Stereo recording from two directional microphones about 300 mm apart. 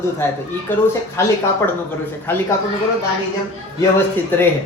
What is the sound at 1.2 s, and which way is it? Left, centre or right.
Speech, centre.